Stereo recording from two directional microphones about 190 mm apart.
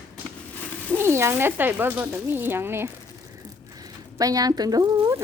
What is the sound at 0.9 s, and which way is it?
Speech, 10° right (ahead or behind).